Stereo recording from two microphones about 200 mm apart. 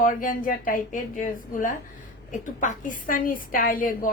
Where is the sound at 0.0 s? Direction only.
45° left (ahead or behind).